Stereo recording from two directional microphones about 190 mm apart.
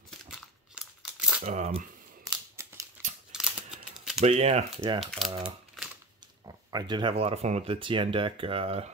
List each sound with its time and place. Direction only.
0.7 s crumpling: 5° right (ahead or behind)
1.4 s speech: 35° right (ahead or behind)
2.2 s scissors: 15° right (ahead or behind)
3.3 s a sound: 5° right (ahead or behind)
4.2 s speech: 35° right (ahead or behind)
5.0 s speech: centre (ahead or behind)
6.4 s speech: 20° right (ahead or behind)